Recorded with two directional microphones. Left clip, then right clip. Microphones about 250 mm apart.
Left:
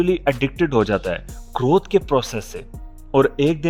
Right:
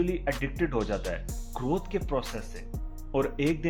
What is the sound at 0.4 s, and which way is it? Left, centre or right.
Speech, left.